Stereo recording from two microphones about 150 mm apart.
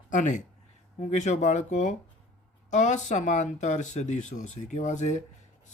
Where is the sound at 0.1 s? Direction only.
55° left (ahead or behind).